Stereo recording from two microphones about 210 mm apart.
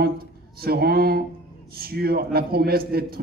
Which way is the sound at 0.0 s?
45° right (ahead or behind).